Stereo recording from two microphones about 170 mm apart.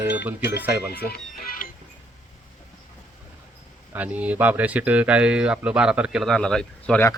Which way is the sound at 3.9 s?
10° right (ahead or behind).